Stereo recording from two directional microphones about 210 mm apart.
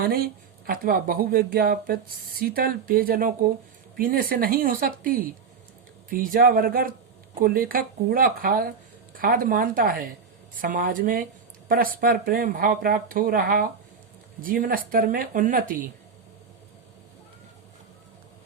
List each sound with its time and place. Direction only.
0.0 s speech: 45° right (ahead or behind)